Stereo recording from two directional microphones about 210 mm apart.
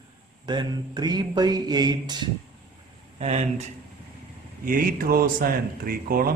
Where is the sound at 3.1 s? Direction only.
30° right (ahead or behind).